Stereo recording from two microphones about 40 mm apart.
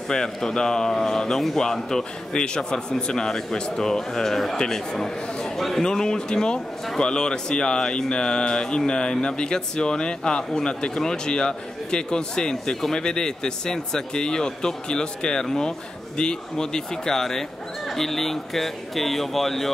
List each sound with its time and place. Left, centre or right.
0.1 s a man's voice: centre